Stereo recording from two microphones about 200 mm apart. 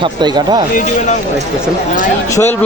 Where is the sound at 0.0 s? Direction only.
20° right (ahead or behind).